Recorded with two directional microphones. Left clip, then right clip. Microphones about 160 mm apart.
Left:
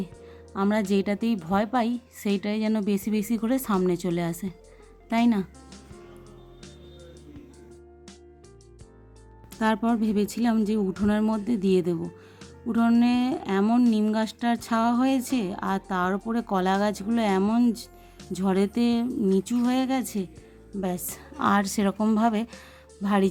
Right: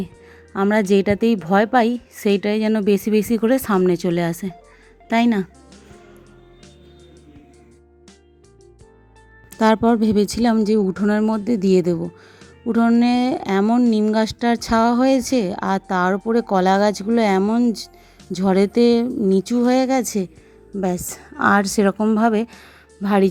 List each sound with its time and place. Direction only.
0.0 s a woman's voice: 30° right (ahead or behind)
9.6 s a woman's voice: 40° right (ahead or behind)
17.7 s music: centre (ahead or behind)
18.3 s speech: 30° right (ahead or behind)
20.7 s a woman's voice: centre (ahead or behind)
21.2 s a woman's voice: 25° right (ahead or behind)